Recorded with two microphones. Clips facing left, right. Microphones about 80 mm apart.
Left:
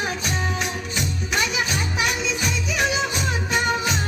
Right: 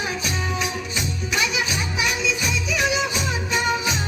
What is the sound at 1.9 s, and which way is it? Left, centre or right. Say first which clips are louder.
Music: even; left.